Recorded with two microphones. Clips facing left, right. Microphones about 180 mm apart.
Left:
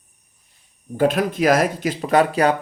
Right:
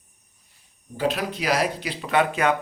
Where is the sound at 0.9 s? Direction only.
50° left (ahead or behind).